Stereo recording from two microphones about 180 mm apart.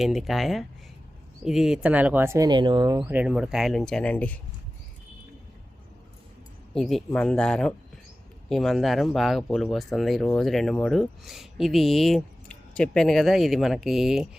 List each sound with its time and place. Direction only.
0.0 s speech: centre (ahead or behind); by 3.1 s 20° right (ahead or behind)
3.1 s speech: 5° right (ahead or behind)
6.7 s speech: centre (ahead or behind)